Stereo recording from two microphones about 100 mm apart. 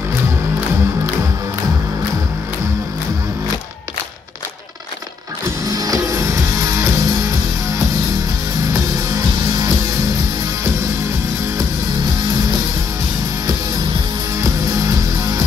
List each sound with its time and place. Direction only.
5.7 s music: 35° right (ahead or behind)
9.1 s music: 40° right (ahead or behind)
14.4 s music: 35° right (ahead or behind)